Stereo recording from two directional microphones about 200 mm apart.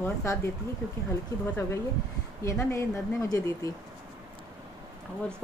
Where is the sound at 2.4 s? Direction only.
15° left (ahead or behind).